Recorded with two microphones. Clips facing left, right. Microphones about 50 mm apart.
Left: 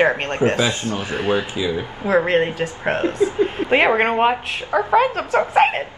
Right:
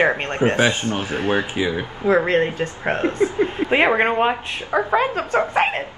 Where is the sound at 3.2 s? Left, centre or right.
Right.